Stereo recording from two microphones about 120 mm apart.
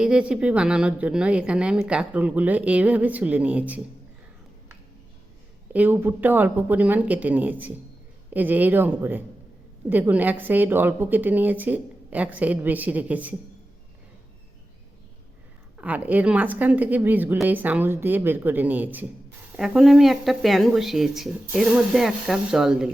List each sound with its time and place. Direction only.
0.0 s a woman's voice: 10° right (ahead or behind)
5.7 s a woman's voice: 15° right (ahead or behind)
15.8 s a woman's voice: 15° right (ahead or behind)